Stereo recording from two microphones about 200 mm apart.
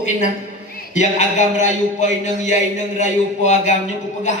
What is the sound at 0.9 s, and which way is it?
A man's voice, 35° left (ahead or behind).